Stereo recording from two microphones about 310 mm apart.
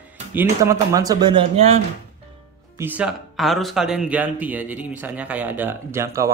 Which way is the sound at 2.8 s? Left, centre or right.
Centre.